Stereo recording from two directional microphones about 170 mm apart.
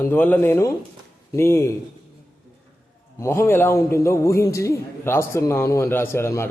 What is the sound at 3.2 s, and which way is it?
A man's voice, 15° left (ahead or behind).